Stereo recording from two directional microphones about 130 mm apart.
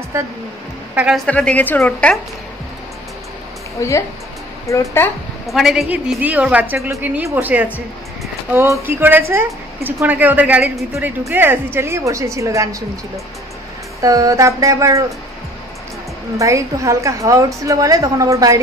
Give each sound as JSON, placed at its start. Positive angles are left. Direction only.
{"t": 1.1, "sound": "a woman's voice", "side_deg": 5}
{"t": 3.8, "sound": "speech", "side_deg": 25}
{"t": 5.5, "sound": "a woman's voice", "side_deg": 0}
{"t": 5.9, "sound": "a woman's voice", "side_deg": -10}
{"t": 14.0, "sound": "a woman's voice", "side_deg": -25}
{"t": 16.3, "sound": "a woman's voice", "side_deg": -25}